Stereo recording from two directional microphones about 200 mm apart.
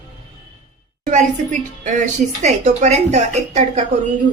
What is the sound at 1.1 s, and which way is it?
A woman's voice, 40° right (ahead or behind).